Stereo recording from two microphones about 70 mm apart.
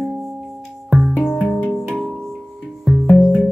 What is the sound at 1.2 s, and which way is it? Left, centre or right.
Music, centre.